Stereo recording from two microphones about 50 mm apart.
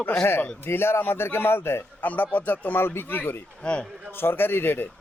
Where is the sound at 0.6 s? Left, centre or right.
Left.